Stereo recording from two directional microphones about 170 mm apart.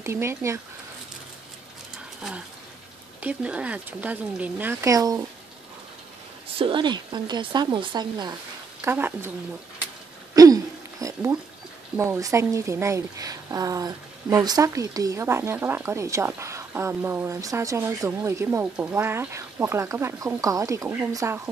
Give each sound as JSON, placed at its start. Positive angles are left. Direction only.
{"t": 0.0, "sound": "speech", "side_deg": -15}
{"t": 3.2, "sound": "speech", "side_deg": -10}
{"t": 6.6, "sound": "speech", "side_deg": -30}
{"t": 8.8, "sound": "speech", "side_deg": -15}
{"t": 10.3, "sound": "a sound", "side_deg": -20}
{"t": 12.0, "sound": "speech", "side_deg": -15}